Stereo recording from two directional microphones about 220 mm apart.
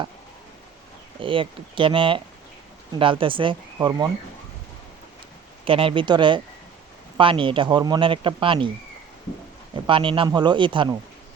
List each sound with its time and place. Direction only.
1.2 s speech: 25° right (ahead or behind)
5.6 s speech: 25° right (ahead or behind)
9.8 s speech: 25° right (ahead or behind)